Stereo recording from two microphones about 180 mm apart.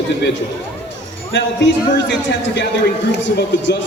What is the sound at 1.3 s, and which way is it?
Speech, 90° left.